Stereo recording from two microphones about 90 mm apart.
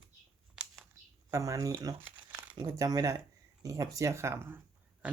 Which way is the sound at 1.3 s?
40° right (ahead or behind).